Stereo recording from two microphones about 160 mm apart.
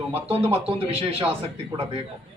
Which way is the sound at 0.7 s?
40° right (ahead or behind).